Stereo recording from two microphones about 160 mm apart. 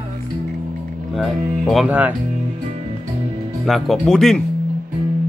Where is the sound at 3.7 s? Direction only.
Centre (ahead or behind).